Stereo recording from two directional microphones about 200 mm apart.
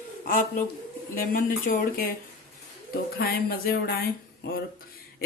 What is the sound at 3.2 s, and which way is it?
Speech, 50° left (ahead or behind).